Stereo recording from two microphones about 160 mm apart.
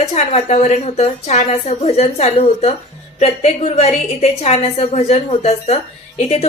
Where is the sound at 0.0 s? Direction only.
45° left (ahead or behind).